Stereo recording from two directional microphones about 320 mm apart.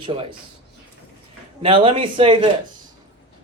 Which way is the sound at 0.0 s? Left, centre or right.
Centre.